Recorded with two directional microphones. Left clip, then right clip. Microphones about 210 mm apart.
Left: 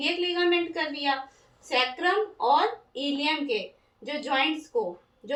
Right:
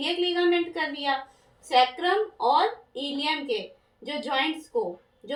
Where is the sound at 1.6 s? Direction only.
20° right (ahead or behind).